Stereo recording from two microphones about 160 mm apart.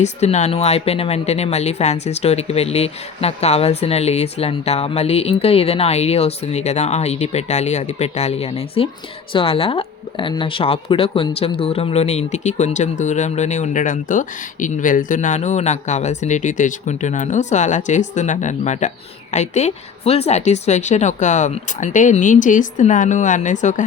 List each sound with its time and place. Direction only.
0.0 s speech: 45° left (ahead or behind)